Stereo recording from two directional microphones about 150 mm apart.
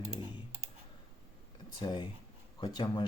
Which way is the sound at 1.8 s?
30° left (ahead or behind).